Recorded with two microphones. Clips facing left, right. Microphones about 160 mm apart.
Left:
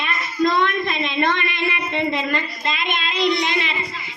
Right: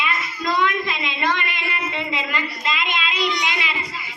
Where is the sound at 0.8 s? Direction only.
50° left (ahead or behind).